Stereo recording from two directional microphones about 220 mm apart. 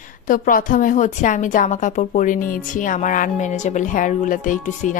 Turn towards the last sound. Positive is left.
turn(degrees=35)  # may be behind; listen again after turning